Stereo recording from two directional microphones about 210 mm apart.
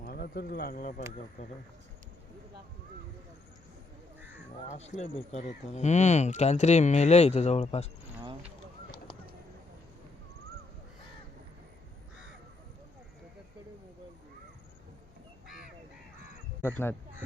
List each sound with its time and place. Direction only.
0.0 s speech: 45° left (ahead or behind)
4.7 s speech: 30° left (ahead or behind)
16.6 s speech: 10° left (ahead or behind)